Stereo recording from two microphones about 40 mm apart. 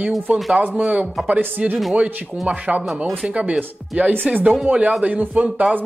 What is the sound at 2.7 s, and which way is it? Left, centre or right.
Speech, right.